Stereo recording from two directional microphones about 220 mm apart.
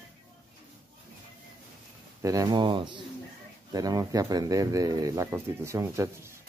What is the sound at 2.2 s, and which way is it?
Speech, 15° right (ahead or behind).